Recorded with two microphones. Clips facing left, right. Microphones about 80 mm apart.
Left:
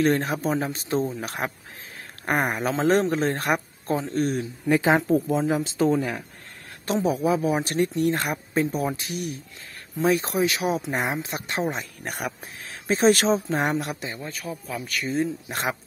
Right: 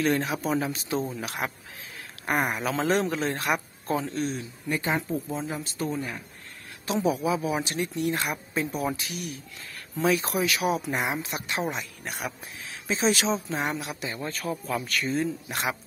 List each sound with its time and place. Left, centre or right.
0.0 s speech: left
4.6 s speech: left
6.9 s speech: left
10.0 s speech: left
10.9 s speech: left
11.7 s speech: left
14.2 s speech: centre
15.0 s speech: left